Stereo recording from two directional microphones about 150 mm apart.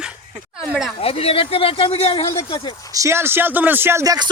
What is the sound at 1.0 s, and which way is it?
Speech, 40° left (ahead or behind).